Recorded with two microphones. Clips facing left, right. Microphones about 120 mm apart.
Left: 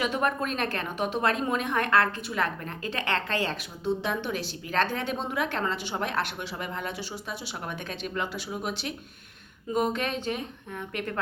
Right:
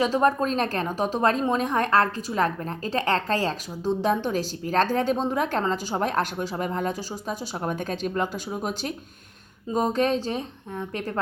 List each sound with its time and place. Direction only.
0.0 s a woman's voice: 35° right (ahead or behind)